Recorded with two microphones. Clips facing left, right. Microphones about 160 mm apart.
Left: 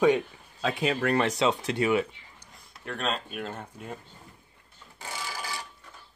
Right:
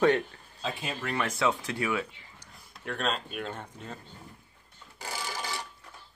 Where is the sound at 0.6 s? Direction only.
85° left.